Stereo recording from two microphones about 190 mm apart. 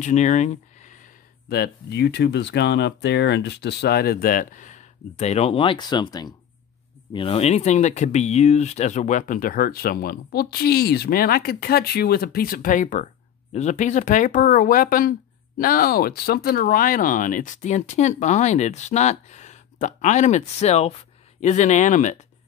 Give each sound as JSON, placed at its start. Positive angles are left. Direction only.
{"t": 0.0, "sound": "speech", "side_deg": 40}